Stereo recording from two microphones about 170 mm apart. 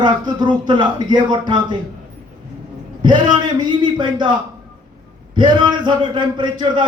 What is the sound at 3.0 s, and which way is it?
Speech, 25° right (ahead or behind).